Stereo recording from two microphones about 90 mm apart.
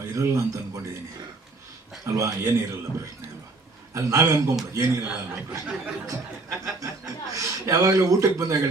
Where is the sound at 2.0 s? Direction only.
35° right (ahead or behind).